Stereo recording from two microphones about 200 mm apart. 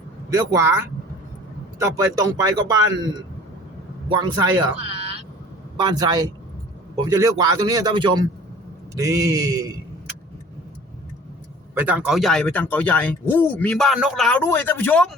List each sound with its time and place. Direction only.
0.3 s speech: 15° right (ahead or behind)
1.8 s speech: 15° right (ahead or behind)
4.2 s a man's voice: 20° right (ahead or behind)
11.7 s speech: 10° right (ahead or behind); by 15.1 s 5° left (ahead or behind)